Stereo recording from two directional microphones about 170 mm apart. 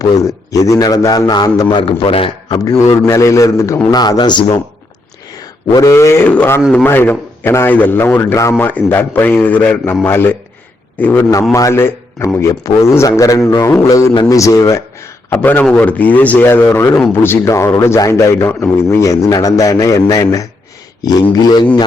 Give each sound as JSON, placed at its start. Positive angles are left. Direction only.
{"t": 0.5, "sound": "a man's voice", "side_deg": 20}
{"t": 3.1, "sound": "a man's voice", "side_deg": 20}
{"t": 5.7, "sound": "a man's voice", "side_deg": 20}
{"t": 6.8, "sound": "a man's voice", "side_deg": 10}